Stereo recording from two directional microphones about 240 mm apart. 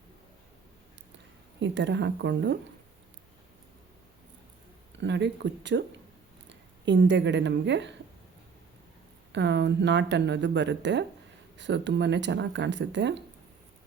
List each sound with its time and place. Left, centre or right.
1.5 s speech: right
4.9 s speech: right
9.3 s speech: right